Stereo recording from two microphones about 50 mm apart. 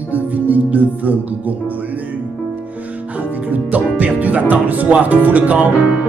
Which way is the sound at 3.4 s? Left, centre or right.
Right.